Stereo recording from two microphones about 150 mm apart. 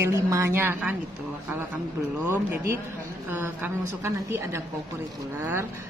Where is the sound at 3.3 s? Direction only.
15° right (ahead or behind).